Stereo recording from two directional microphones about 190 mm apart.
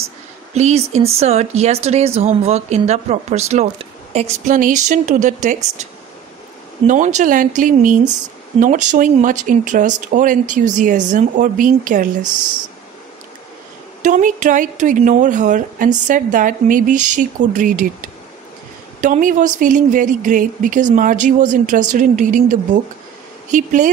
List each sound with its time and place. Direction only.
0.6 s speech: 35° right (ahead or behind)
6.9 s a woman's voice: 40° right (ahead or behind)
14.0 s a woman's voice: 40° right (ahead or behind)